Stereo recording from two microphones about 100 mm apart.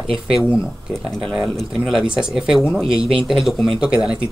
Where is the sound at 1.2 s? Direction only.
Centre (ahead or behind).